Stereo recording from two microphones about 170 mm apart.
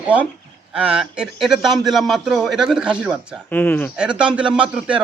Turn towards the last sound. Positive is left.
turn(degrees=-5)  # may be behind; listen again after turning